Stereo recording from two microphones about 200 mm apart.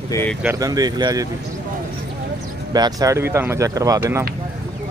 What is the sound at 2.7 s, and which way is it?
Speech, 20° right (ahead or behind).